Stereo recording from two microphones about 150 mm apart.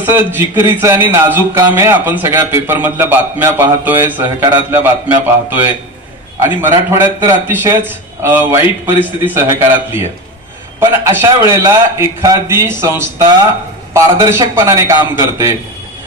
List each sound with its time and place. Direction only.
0.0 s a man's voice: 15° right (ahead or behind)
10.8 s a man's voice: 15° right (ahead or behind)